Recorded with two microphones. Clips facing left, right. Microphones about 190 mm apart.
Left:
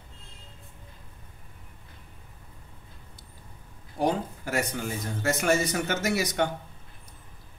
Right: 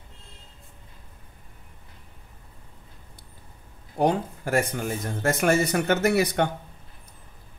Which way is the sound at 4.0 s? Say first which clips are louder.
Right 4 dB; 55° right (ahead or behind).